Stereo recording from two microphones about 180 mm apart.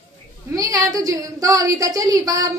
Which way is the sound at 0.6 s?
20° right (ahead or behind).